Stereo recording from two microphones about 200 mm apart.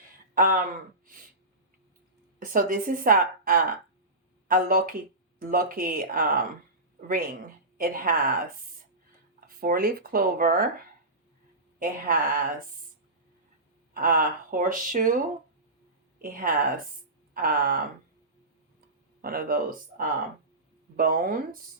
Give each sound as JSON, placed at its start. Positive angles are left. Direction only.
{"t": 0.3, "sound": "speech", "side_deg": -45}
{"t": 2.4, "sound": "a woman's voice", "side_deg": -45}
{"t": 7.8, "sound": "a woman's voice", "side_deg": -45}
{"t": 11.8, "sound": "a woman's voice", "side_deg": -45}
{"t": 13.9, "sound": "a woman's voice", "side_deg": -45}
{"t": 16.1, "sound": "a woman's voice", "side_deg": -45}
{"t": 19.2, "sound": "a woman's voice", "side_deg": -45}